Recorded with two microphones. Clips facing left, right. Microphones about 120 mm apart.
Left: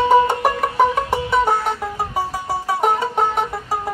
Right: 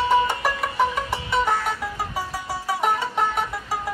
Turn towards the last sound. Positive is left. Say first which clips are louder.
# left 4 dB
turn(degrees=45)  # may be behind; listen again after turning